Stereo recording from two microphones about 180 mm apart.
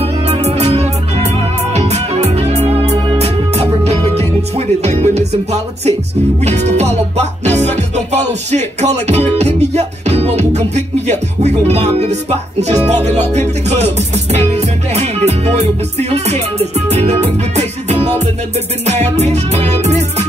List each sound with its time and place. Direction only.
0.0 s music: 40° right (ahead or behind)